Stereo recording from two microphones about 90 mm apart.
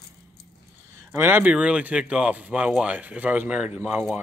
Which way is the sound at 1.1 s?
25° right (ahead or behind).